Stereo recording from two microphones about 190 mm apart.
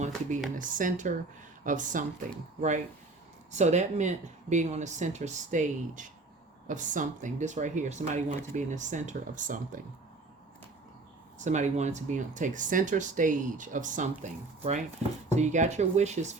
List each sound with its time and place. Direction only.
0.6 s speech: 45° right (ahead or behind)
11.3 s speech: 40° right (ahead or behind)